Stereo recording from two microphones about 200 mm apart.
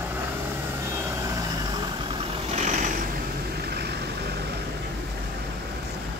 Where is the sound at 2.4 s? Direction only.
35° right (ahead or behind).